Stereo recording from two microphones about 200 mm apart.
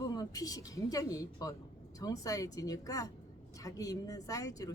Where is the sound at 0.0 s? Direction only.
20° left (ahead or behind).